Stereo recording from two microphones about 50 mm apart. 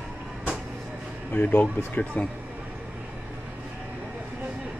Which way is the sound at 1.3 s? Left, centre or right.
Left.